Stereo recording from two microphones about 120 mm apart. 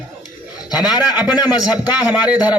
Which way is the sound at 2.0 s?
10° right (ahead or behind).